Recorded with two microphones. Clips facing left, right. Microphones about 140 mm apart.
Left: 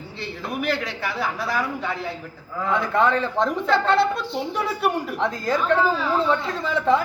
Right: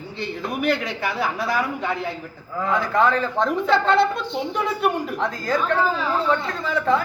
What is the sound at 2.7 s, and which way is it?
Speech, 25° left (ahead or behind).